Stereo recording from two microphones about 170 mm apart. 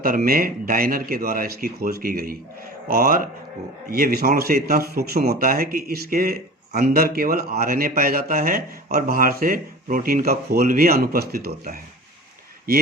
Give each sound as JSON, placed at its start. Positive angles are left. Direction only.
{"t": 0.0, "sound": "speech", "side_deg": -60}